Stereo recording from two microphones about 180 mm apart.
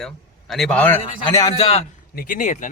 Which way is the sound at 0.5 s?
5° left (ahead or behind).